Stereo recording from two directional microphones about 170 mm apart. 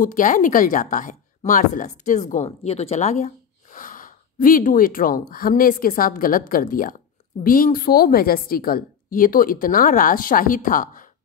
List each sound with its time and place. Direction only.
0.0 s a woman's voice: 50° left (ahead or behind)